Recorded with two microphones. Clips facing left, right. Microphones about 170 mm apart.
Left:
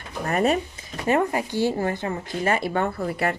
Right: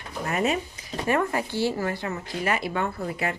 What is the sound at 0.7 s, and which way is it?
Speech, 25° left (ahead or behind).